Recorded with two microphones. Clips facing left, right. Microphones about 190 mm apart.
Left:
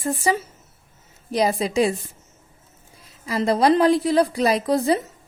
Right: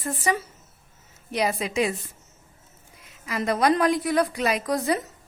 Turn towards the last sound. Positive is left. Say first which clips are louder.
# left 5 dB
turn(degrees=30)  # may be behind; listen again after turning